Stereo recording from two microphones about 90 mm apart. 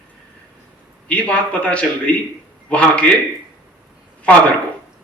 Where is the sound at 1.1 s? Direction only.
15° left (ahead or behind).